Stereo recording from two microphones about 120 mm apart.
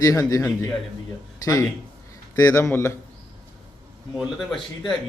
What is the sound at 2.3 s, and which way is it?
Speech, 30° left (ahead or behind).